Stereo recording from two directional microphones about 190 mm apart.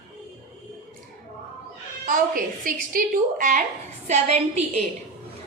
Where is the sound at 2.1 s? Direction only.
50° right (ahead or behind).